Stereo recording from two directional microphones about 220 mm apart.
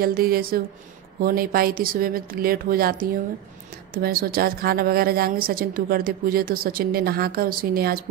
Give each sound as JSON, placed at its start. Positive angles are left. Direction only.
{"t": 0.0, "sound": "a woman's voice", "side_deg": -40}